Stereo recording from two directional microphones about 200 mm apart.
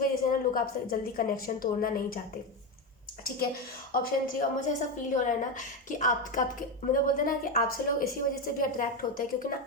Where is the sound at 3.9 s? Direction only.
40° left (ahead or behind).